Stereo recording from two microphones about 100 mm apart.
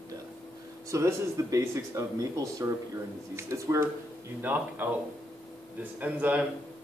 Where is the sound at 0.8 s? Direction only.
30° right (ahead or behind).